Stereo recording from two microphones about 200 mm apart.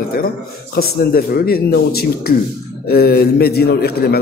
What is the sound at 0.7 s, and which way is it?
A man's voice, 50° left (ahead or behind).